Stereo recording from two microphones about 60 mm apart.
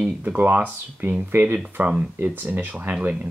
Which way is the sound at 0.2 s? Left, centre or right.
Right.